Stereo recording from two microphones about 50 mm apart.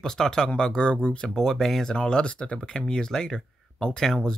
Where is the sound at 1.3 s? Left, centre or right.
Centre.